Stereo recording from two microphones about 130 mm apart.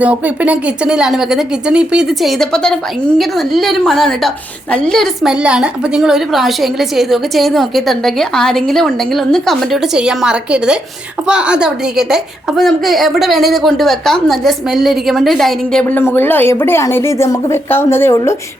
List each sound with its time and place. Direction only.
0.0 s a woman's voice: 10° right (ahead or behind)
16.1 s a woman's voice: 15° left (ahead or behind)